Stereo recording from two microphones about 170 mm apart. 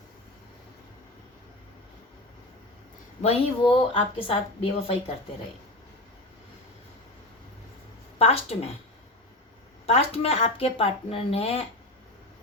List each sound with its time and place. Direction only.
3.2 s a woman's voice: 35° left (ahead or behind)
8.2 s a woman's voice: 35° left (ahead or behind)
9.8 s a woman's voice: 35° left (ahead or behind)